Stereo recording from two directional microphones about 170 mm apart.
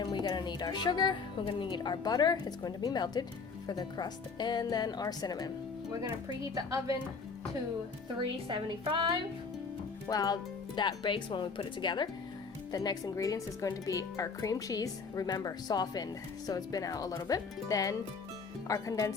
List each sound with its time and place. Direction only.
0.0 s a woman's voice: 25° left (ahead or behind)
6.5 s a woman's voice: 20° right (ahead or behind)
8.4 s a woman's voice: 30° right (ahead or behind)
10.1 s speech: 20° left (ahead or behind)